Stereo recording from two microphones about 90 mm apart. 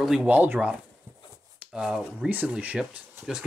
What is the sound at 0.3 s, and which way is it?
Speech, 20° right (ahead or behind).